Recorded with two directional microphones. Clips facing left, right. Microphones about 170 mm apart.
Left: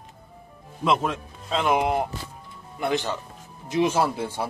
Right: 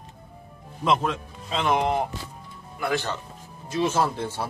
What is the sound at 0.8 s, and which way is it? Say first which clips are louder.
Speech: even; centre (ahead or behind).